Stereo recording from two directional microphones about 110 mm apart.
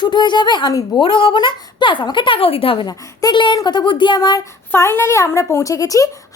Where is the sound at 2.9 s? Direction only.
40° left (ahead or behind).